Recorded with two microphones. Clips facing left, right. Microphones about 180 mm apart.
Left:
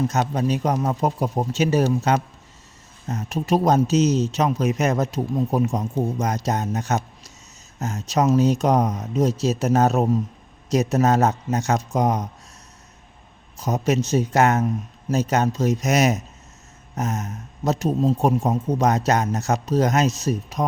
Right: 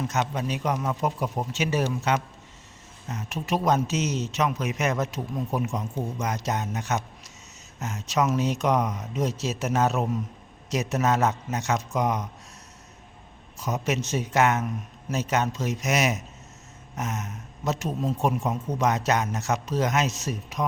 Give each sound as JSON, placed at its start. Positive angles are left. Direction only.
{"t": 0.0, "sound": "speech", "side_deg": 35}
{"t": 13.6, "sound": "speech", "side_deg": 35}